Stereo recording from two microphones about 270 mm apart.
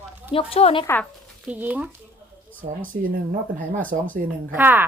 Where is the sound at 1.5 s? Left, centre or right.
Centre.